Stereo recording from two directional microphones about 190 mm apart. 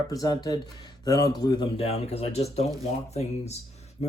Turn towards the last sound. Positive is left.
turn(degrees=35)  # may be behind; listen again after turning